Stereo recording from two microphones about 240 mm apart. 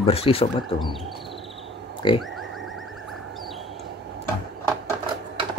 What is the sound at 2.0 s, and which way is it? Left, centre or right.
Speech, centre.